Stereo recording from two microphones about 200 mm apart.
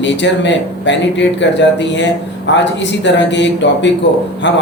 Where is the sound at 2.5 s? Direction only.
65° left (ahead or behind).